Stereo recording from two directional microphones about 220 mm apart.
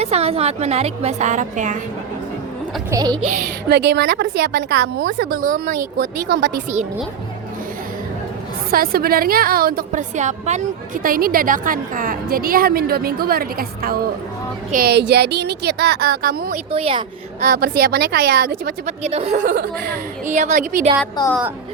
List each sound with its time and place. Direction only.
0.0 s a woman's voice: 30° right (ahead or behind)
2.9 s speech: 15° right (ahead or behind)
3.2 s a woman's voice: 40° right (ahead or behind)
8.7 s a woman's voice: 45° right (ahead or behind)
16.7 s a woman's voice: 25° right (ahead or behind)
17.4 s a woman's voice: 40° right (ahead or behind)
21.2 s a woman's voice: 20° left (ahead or behind)